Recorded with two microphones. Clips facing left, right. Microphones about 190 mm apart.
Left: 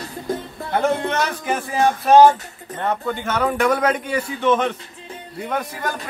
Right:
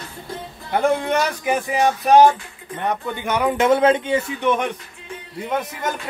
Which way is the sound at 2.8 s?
15° right (ahead or behind).